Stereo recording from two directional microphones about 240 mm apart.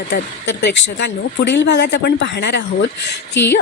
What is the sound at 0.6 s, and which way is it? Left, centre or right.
A woman's voice, left.